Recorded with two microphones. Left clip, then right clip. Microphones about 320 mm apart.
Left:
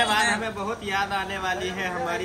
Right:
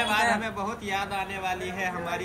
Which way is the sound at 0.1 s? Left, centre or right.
Centre.